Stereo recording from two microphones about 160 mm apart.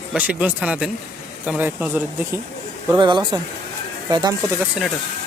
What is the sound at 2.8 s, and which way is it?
Speech, 25° right (ahead or behind).